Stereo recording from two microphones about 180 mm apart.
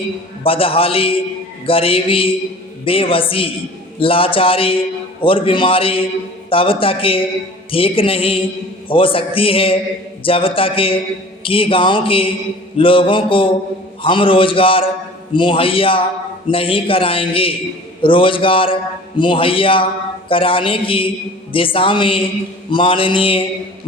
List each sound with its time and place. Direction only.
0.4 s a man's voice: 30° left (ahead or behind)